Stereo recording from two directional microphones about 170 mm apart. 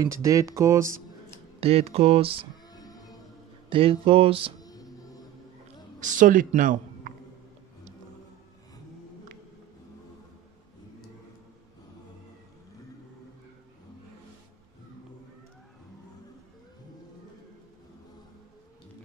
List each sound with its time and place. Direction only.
0.0 s speech: 20° right (ahead or behind)
1.6 s speech: 35° right (ahead or behind)
2.7 s printer: 20° left (ahead or behind)
3.7 s speech: 35° right (ahead or behind)
4.6 s music: 20° left (ahead or behind)
5.9 s speech: 50° right (ahead or behind)